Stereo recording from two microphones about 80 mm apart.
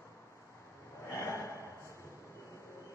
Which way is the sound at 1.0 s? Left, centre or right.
Left.